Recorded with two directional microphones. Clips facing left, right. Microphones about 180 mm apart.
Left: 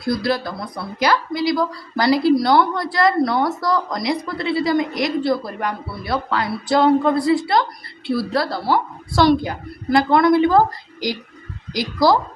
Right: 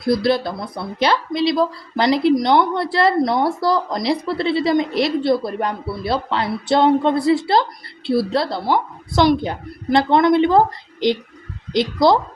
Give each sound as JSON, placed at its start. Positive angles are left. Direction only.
{"t": 0.0, "sound": "speech", "side_deg": -25}
{"t": 9.4, "sound": "speech", "side_deg": -25}
{"t": 11.7, "sound": "speech", "side_deg": -25}